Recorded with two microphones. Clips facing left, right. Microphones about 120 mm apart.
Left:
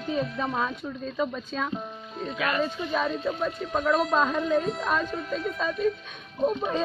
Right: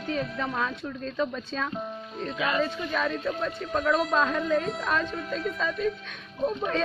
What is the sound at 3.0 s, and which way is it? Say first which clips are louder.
Speech: left 1 dB; centre (ahead or behind).